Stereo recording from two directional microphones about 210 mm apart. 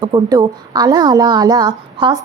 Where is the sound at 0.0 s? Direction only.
20° right (ahead or behind).